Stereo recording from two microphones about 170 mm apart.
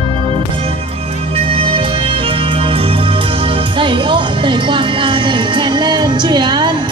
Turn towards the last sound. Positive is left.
turn(degrees=-25)  # may be behind; listen again after turning